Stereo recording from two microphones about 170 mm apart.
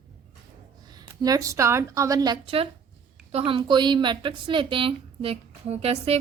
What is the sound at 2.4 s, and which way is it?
A woman's voice, 35° right (ahead or behind).